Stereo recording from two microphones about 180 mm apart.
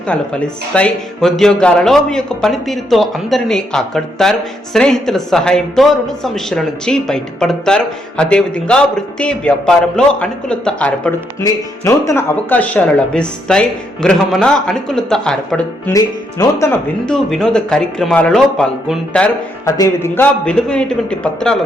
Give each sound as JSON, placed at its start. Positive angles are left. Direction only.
{"t": 0.1, "sound": "speech", "side_deg": 5}
{"t": 11.4, "sound": "speech", "side_deg": 15}
{"t": 15.9, "sound": "speech", "side_deg": 20}
{"t": 17.1, "sound": "speech", "side_deg": 0}
{"t": 19.6, "sound": "speech", "side_deg": 20}